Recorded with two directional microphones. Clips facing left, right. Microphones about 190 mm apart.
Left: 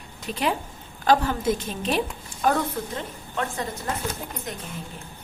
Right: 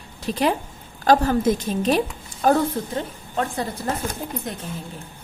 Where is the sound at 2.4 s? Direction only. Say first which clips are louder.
Right 5 dB; 35° right (ahead or behind).